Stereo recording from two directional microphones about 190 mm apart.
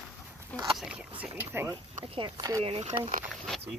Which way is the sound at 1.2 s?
10° right (ahead or behind).